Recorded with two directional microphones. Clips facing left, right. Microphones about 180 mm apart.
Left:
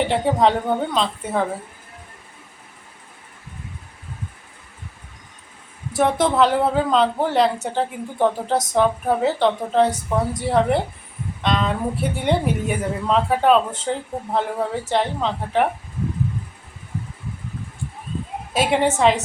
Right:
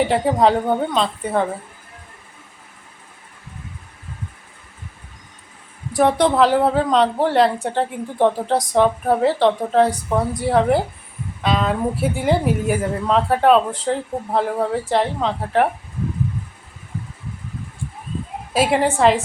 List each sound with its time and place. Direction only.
0.0 s a woman's voice: centre (ahead or behind)
6.0 s a woman's voice: centre (ahead or behind)
18.5 s a woman's voice: centre (ahead or behind)